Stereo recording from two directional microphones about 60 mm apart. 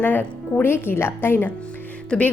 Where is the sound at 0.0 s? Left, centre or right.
Left.